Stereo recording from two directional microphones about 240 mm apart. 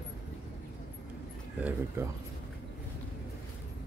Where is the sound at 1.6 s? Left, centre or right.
Centre.